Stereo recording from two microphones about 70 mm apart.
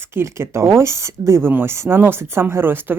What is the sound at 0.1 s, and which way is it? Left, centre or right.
Speech, right.